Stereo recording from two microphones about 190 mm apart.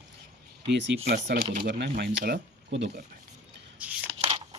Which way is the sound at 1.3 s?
50° right (ahead or behind).